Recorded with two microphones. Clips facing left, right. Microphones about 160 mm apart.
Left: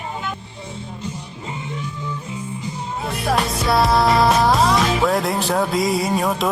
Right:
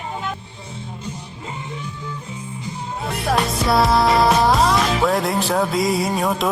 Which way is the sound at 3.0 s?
Centre (ahead or behind).